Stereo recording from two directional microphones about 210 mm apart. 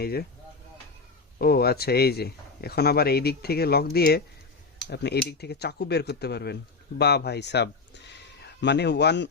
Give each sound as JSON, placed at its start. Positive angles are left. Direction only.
{"t": 0.0, "sound": "a man's voice", "side_deg": 45}
{"t": 1.4, "sound": "a man's voice", "side_deg": 45}